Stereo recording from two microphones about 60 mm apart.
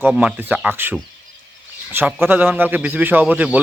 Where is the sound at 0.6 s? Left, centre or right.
Right.